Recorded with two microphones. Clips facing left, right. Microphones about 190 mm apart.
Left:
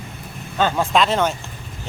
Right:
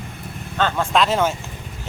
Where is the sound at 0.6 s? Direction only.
10° left (ahead or behind).